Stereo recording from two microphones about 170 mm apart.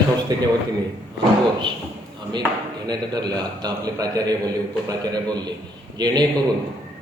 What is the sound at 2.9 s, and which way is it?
A man's voice, 25° right (ahead or behind).